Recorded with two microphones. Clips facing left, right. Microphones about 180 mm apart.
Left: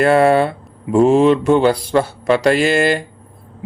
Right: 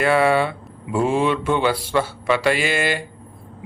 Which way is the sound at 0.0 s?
45° left (ahead or behind).